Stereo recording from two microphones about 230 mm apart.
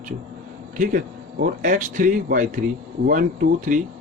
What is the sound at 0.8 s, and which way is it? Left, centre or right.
Speech, right.